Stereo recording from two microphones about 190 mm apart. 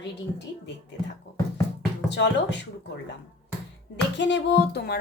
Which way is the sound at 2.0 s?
65° left (ahead or behind).